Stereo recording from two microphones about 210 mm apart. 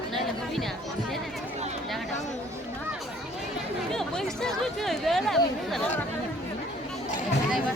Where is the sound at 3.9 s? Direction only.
Centre (ahead or behind).